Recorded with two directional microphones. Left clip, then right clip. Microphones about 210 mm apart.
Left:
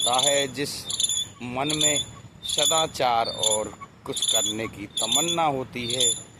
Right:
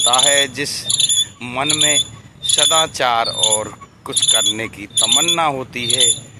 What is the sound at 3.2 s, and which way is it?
Speech, 20° right (ahead or behind).